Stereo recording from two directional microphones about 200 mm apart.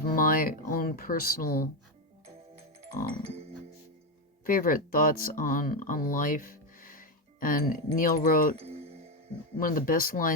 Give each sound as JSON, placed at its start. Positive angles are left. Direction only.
{"t": 0.0, "sound": "speech", "side_deg": 45}
{"t": 3.0, "sound": "speech", "side_deg": 45}
{"t": 4.4, "sound": "speech", "side_deg": 45}
{"t": 8.5, "sound": "music", "side_deg": -30}
{"t": 9.6, "sound": "speech", "side_deg": 45}